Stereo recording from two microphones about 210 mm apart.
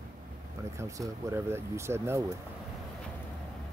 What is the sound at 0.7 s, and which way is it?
Speech, 15° right (ahead or behind).